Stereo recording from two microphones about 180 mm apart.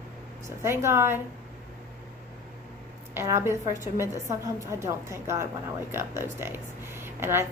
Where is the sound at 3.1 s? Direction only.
15° right (ahead or behind).